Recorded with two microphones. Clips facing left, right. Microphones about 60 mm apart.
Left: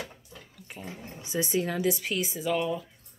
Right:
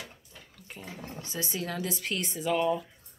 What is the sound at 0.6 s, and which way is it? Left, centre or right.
Dog, centre.